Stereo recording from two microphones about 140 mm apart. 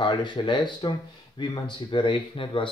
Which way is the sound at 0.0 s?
35° left (ahead or behind).